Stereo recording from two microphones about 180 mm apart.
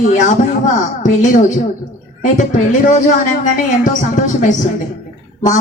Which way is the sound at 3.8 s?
45° left (ahead or behind).